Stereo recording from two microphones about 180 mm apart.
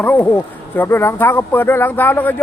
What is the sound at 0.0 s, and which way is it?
Speech, 10° left (ahead or behind).